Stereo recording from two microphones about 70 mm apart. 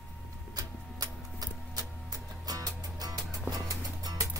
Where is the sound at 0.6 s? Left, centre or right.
Right.